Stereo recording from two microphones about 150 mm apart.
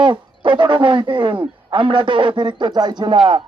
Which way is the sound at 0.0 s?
35° right (ahead or behind).